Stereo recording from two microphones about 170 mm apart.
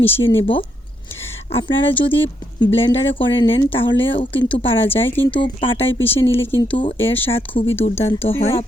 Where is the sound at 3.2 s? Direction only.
25° left (ahead or behind).